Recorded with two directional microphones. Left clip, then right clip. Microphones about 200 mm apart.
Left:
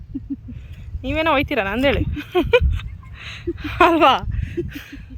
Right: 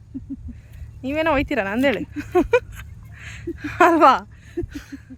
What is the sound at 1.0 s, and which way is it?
Speech, 15° right (ahead or behind).